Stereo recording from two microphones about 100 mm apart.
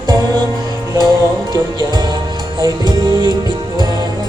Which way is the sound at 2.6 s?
40° right (ahead or behind).